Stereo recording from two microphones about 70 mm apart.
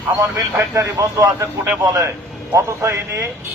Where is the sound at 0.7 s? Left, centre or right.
Right.